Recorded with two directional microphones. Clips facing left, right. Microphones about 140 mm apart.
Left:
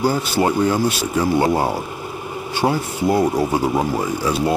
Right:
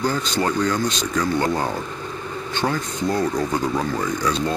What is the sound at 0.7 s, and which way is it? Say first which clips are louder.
Speech: left 4 dB; 10° left (ahead or behind).